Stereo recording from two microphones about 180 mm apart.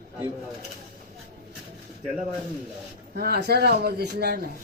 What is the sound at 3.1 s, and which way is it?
A man's voice, 60° right (ahead or behind).